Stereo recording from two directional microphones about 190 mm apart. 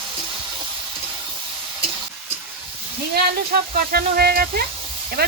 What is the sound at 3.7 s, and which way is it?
Speech, 55° right (ahead or behind).